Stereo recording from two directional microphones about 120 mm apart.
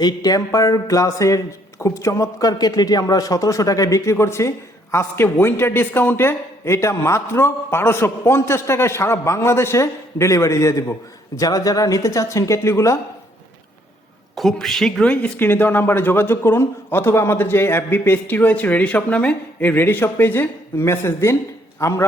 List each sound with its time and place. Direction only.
0.0 s a man's voice: 35° left (ahead or behind)
14.3 s a man's voice: centre (ahead or behind); by 22.0 s 25° left (ahead or behind)